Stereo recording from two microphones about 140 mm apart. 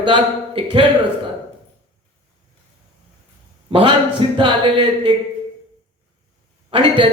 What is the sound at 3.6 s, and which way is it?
Speech, 35° right (ahead or behind).